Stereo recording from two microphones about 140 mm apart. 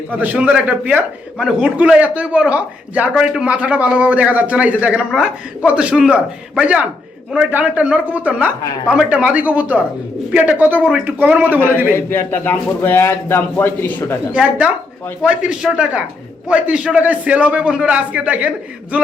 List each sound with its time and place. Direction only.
0.1 s a man's voice: 10° right (ahead or behind)
11.9 s a man's voice: 15° left (ahead or behind)
14.3 s a man's voice: 10° right (ahead or behind)